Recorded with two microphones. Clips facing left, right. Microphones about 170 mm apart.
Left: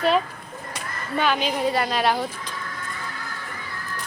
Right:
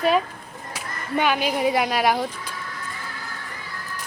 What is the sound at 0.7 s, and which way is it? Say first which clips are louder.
Speech: right 3 dB; 10° right (ahead or behind).